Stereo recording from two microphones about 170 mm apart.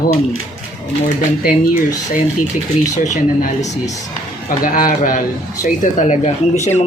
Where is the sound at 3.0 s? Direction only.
50° left (ahead or behind).